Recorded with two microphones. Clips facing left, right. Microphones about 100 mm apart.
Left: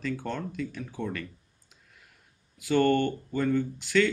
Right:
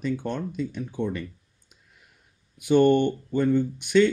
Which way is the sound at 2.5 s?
20° right (ahead or behind).